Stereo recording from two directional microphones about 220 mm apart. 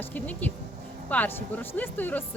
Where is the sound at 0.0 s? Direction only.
5° left (ahead or behind).